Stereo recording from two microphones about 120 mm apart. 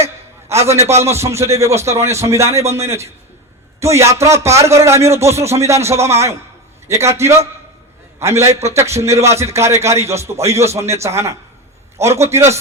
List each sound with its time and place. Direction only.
0.0 s a sound: 25° right (ahead or behind)
0.8 s a man's voice: 65° right (ahead or behind)
1.0 s a man's voice: 25° right (ahead or behind)